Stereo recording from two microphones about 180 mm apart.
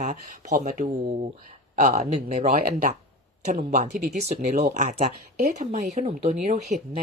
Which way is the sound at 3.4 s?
40° right (ahead or behind).